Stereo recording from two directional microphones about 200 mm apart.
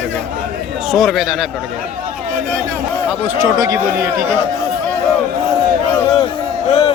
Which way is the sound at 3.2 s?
15° right (ahead or behind).